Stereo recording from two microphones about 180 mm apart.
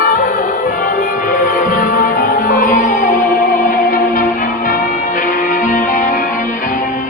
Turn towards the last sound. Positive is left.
turn(degrees=45)  # may be behind; listen again after turning